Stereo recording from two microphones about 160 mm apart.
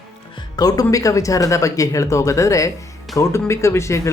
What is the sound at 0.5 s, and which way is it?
Speech, 25° left (ahead or behind).